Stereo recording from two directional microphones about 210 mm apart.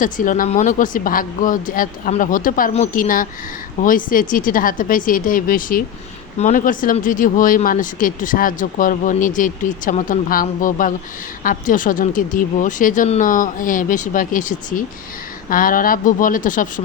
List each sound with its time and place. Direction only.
0.0 s speech: 40° left (ahead or behind)